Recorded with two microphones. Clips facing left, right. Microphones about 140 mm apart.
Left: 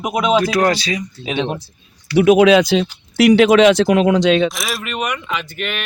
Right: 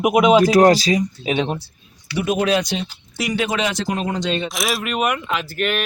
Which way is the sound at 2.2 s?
85° left.